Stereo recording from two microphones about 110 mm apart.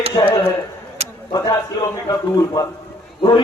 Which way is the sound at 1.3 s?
35° left (ahead or behind).